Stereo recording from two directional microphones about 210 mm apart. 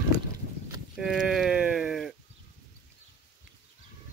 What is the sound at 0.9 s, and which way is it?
Speech, centre (ahead or behind).